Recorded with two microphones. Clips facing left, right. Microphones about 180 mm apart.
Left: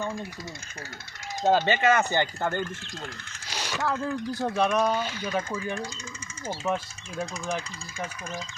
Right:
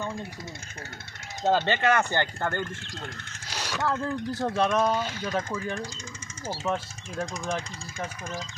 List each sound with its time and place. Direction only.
1.5 s speech: 15° left (ahead or behind)
3.5 s a sound: 5° left (ahead or behind)
4.4 s speech: 10° left (ahead or behind)